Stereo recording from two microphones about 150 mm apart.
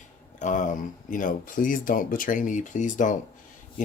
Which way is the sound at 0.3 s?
55° left (ahead or behind).